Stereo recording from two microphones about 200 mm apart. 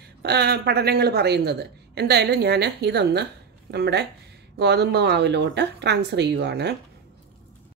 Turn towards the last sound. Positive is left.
turn(degrees=-55)  # may be behind; listen again after turning